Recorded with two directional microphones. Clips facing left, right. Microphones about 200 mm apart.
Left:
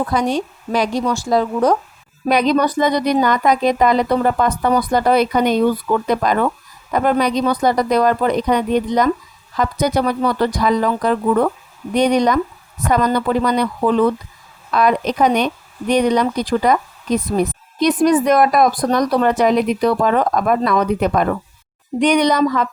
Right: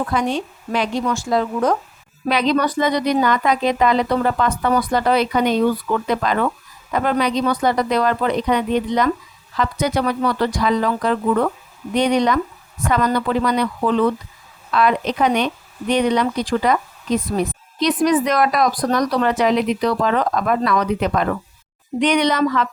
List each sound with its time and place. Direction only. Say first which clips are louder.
0.1 s a woman's voice: left 2 dB; 40° left (ahead or behind)
18.8 s speech: left 2 dB; 25° left (ahead or behind)
19.1 s a woman's voice: left 4 dB; 45° left (ahead or behind)